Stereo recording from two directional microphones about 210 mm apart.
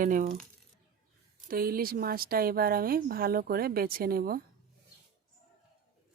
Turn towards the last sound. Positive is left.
turn(degrees=-45)  # may be behind; listen again after turning